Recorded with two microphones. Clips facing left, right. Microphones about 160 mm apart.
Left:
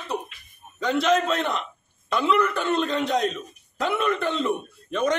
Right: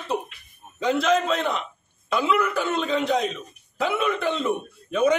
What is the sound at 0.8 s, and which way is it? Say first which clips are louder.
Speech: even; centre (ahead or behind).